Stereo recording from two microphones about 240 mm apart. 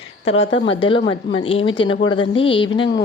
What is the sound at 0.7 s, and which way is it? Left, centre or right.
Speech, left.